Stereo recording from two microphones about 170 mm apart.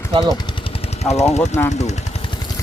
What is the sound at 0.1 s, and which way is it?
Speech, 25° right (ahead or behind).